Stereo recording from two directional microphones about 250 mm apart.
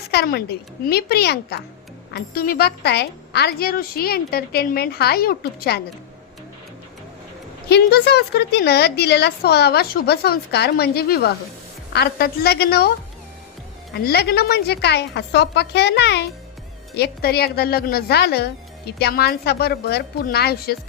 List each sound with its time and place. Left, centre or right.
0.1 s speech: left
7.7 s speech: left
13.9 s speech: left